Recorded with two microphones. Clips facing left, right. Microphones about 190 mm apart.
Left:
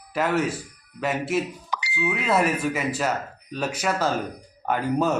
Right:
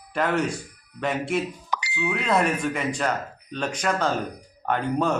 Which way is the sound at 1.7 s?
50° right (ahead or behind).